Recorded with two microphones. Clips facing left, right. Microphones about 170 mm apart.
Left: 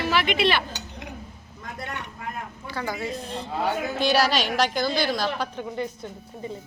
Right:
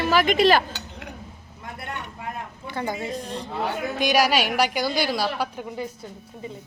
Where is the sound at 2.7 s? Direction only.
20° right (ahead or behind); by 5.9 s 5° right (ahead or behind).